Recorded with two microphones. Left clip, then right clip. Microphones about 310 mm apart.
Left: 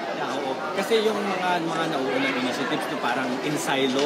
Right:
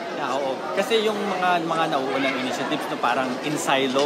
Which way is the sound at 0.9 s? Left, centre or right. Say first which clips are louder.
Left 1 dB; centre.